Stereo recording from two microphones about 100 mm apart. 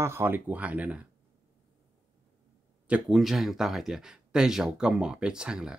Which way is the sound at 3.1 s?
Centre (ahead or behind).